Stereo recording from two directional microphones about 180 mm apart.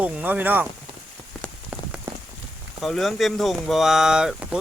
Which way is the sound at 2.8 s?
Centre (ahead or behind).